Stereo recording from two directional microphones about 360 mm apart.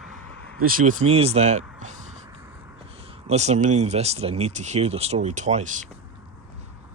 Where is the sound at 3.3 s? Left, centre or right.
Centre.